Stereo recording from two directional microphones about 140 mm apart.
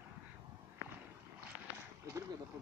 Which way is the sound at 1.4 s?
20° right (ahead or behind).